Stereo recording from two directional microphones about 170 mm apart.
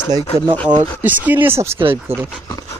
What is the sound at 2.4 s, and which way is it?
Speech, 20° left (ahead or behind).